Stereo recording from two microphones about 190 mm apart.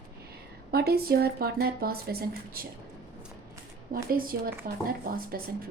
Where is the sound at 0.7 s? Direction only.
55° right (ahead or behind).